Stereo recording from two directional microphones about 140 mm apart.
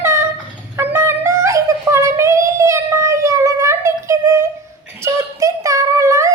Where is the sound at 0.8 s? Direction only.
15° right (ahead or behind).